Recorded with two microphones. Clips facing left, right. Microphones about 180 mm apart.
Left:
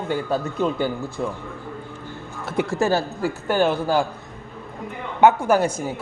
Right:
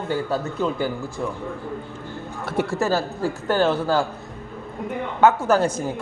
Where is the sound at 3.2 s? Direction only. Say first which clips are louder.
Right 1 dB; 10° left (ahead or behind).